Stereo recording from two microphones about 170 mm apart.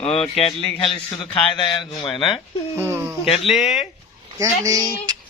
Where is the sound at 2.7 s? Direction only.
15° right (ahead or behind).